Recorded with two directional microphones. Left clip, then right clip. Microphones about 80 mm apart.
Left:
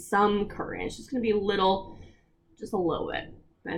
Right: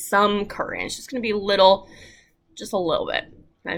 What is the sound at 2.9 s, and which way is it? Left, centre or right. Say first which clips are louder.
Speech: right 8 dB; right.